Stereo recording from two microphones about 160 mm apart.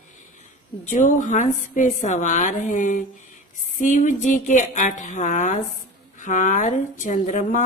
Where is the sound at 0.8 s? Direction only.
55° left (ahead or behind).